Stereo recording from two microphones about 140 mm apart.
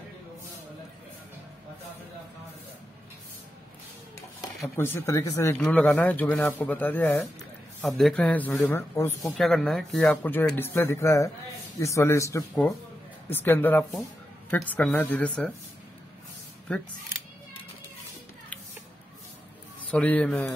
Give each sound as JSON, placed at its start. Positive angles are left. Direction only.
{"t": 4.7, "sound": "speech", "side_deg": 20}
{"t": 9.2, "sound": "a man's voice", "side_deg": 0}
{"t": 19.8, "sound": "a man's voice", "side_deg": 10}